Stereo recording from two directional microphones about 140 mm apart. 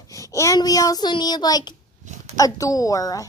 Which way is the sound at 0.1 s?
25° left (ahead or behind).